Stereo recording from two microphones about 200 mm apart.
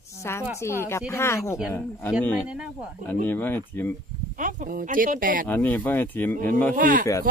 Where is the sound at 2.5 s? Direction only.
5° right (ahead or behind).